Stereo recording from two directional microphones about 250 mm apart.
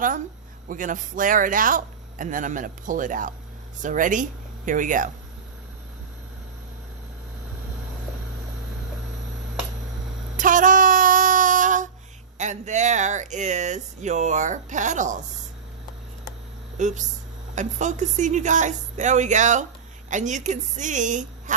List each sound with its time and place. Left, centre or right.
0.7 s a man's voice: right
10.3 s a sound: right
12.4 s speech: right
16.7 s speech: right